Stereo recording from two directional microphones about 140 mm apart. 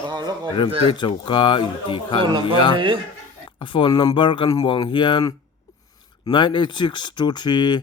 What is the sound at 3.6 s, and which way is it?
Speech, 35° left (ahead or behind).